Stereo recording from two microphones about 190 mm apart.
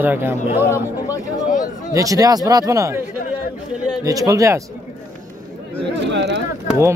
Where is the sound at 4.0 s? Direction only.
20° right (ahead or behind).